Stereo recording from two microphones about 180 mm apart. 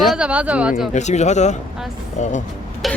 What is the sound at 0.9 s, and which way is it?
Speech, 40° left (ahead or behind).